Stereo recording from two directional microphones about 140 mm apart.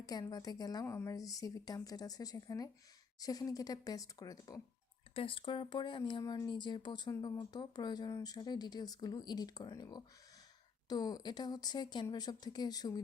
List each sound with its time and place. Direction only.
0.0 s speech: 30° left (ahead or behind)
5.1 s speech: 40° left (ahead or behind)